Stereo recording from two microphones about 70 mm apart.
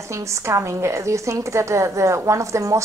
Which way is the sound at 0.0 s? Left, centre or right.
Right.